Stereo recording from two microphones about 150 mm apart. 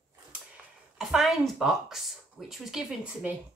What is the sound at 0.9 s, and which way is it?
Speech, centre (ahead or behind).